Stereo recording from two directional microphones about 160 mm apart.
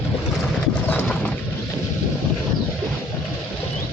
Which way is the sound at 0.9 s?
10° left (ahead or behind).